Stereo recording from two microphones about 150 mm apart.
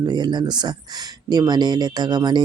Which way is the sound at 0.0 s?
30° right (ahead or behind).